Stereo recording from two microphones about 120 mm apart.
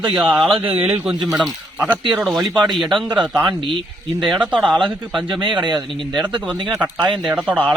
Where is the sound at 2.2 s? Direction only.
Centre (ahead or behind).